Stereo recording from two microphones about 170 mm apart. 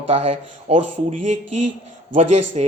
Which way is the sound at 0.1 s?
35° right (ahead or behind).